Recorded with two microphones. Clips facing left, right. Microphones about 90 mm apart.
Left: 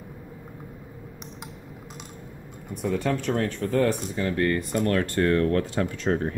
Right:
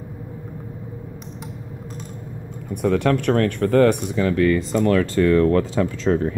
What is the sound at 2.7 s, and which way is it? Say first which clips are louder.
Speech: right 7 dB; 75° right (ahead or behind).